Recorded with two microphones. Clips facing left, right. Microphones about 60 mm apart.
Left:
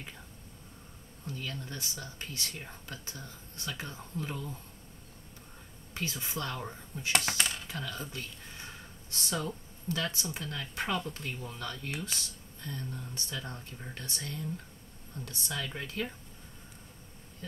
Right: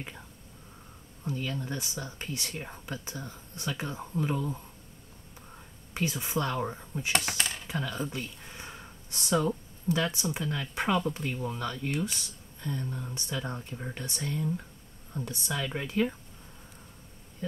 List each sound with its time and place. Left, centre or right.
1.2 s speech: right
5.9 s speech: right